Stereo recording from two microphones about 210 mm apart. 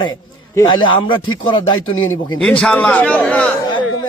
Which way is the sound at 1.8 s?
75° left (ahead or behind).